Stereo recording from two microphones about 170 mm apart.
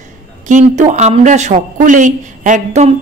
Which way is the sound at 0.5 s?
45° right (ahead or behind).